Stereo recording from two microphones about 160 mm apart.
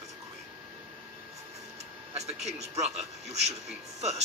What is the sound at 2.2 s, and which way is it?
A man's voice, 45° right (ahead or behind).